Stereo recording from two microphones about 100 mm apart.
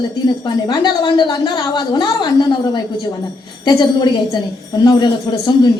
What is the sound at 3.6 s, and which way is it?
A woman's voice, 45° left (ahead or behind).